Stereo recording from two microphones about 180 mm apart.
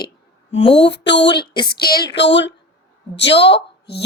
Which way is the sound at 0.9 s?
75° left (ahead or behind).